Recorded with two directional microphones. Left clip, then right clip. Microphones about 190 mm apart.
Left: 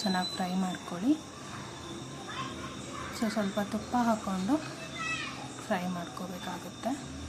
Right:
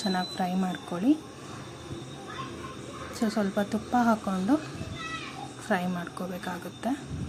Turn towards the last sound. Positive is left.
turn(degrees=-20)  # may be behind; listen again after turning